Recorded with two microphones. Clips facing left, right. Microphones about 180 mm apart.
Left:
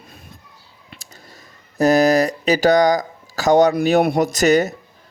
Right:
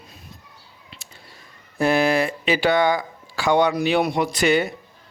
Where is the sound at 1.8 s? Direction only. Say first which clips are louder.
Left 5 dB; 40° left (ahead or behind).